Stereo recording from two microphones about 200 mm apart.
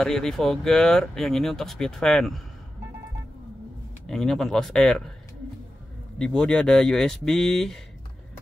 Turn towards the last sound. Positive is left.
turn(degrees=0)  # may be behind; listen again after turning